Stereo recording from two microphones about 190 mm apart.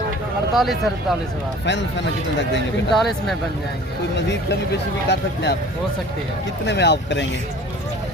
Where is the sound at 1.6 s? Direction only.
70° left (ahead or behind).